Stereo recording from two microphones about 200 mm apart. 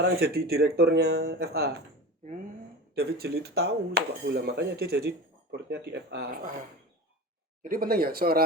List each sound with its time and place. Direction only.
0.0 s speech: 50° right (ahead or behind)
2.9 s speech: 50° right (ahead or behind)
7.6 s speech: 45° right (ahead or behind)